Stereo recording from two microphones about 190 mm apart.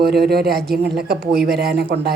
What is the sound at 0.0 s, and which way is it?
Speech, 55° right (ahead or behind).